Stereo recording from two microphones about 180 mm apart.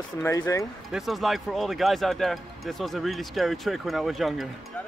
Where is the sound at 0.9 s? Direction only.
Centre (ahead or behind).